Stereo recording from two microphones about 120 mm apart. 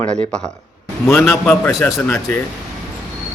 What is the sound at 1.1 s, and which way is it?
A man's voice, 10° left (ahead or behind).